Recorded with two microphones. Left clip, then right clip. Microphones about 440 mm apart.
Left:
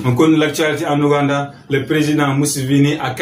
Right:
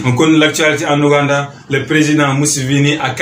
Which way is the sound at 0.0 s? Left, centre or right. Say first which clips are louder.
Right 3 dB; left.